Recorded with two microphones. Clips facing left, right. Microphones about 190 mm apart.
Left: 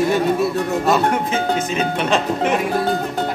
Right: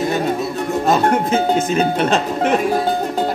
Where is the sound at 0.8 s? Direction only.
45° right (ahead or behind).